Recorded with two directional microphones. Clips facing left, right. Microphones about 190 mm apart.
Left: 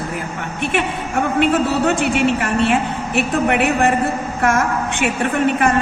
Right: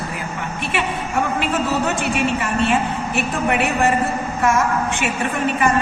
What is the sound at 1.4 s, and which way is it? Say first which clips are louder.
A woman's voice: left 4 dB; 60° left (ahead or behind).